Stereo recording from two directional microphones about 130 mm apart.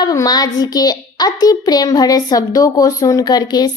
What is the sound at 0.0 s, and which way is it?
A child's voice, 30° left (ahead or behind).